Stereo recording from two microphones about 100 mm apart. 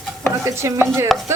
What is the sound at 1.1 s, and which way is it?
Chopping, centre (ahead or behind).